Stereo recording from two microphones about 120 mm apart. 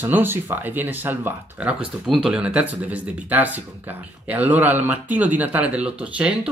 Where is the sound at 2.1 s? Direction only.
5° right (ahead or behind).